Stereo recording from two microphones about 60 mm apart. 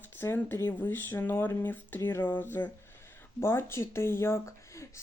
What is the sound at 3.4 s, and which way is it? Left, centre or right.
Speech, left.